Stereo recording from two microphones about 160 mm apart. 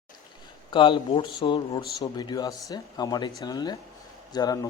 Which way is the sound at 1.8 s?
75° left (ahead or behind).